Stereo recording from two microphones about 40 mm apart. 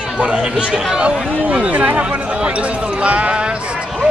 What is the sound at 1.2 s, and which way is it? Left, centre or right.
Speech, right.